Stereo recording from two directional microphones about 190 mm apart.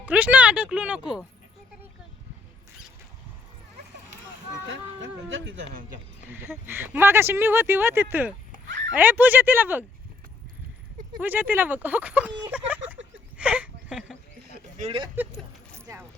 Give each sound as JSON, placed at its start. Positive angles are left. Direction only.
{"t": 0.0, "sound": "speech", "side_deg": -10}
{"t": 4.7, "sound": "speech", "side_deg": -80}
{"t": 6.2, "sound": "speech", "side_deg": -10}
{"t": 11.2, "sound": "speech", "side_deg": -10}
{"t": 13.3, "sound": "a sound", "side_deg": -5}
{"t": 14.8, "sound": "speech", "side_deg": -30}